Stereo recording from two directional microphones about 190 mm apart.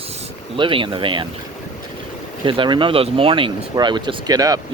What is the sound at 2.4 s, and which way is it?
Speech, 25° right (ahead or behind).